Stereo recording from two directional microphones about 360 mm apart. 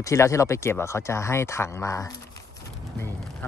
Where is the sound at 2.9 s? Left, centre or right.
Centre.